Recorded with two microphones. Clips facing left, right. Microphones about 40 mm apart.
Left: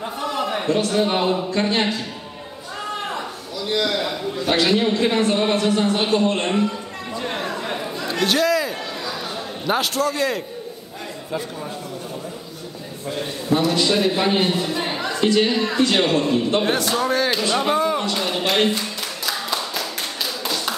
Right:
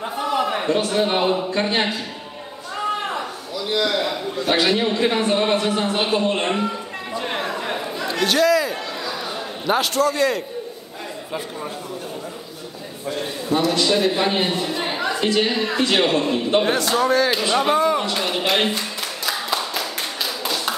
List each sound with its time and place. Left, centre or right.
0.0 s a man's voice: centre
7.2 s a sound: centre
9.7 s a man's voice: centre
13.0 s a man's voice: centre
20.4 s tap: centre